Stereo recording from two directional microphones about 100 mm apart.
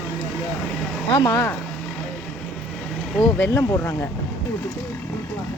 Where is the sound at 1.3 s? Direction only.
30° left (ahead or behind).